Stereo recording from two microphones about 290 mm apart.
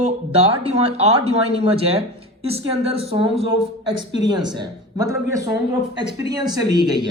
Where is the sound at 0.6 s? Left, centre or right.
Right.